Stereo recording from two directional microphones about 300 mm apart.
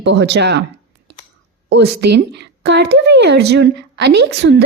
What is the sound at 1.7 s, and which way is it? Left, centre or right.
A woman's voice, right.